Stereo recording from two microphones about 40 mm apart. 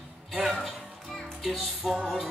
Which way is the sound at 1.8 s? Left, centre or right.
Centre.